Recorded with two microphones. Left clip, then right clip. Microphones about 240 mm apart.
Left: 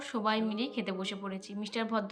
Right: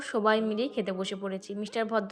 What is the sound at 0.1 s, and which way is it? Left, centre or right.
A woman's voice, right.